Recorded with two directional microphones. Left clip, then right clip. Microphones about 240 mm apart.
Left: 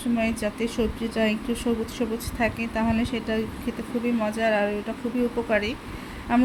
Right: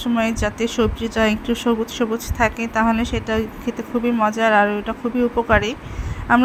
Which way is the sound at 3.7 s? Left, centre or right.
Centre.